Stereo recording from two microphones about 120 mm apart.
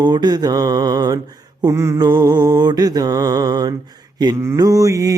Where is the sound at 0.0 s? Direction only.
35° right (ahead or behind).